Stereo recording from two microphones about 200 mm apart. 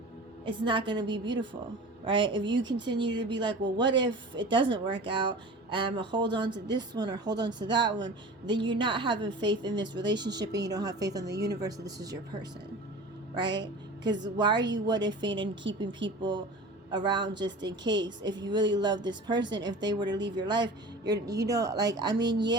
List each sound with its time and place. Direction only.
0.4 s a woman's voice: 25° right (ahead or behind)
10.1 s speech: 65° right (ahead or behind)
10.5 s a woman's voice: 20° right (ahead or behind)
15.6 s speech: 65° right (ahead or behind)
16.9 s a woman's voice: 20° right (ahead or behind)
22.1 s speech: 60° right (ahead or behind)